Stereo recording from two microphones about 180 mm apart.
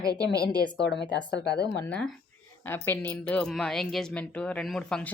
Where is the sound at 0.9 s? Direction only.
70° left (ahead or behind).